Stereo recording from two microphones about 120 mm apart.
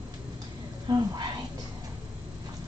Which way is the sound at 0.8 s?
35° right (ahead or behind).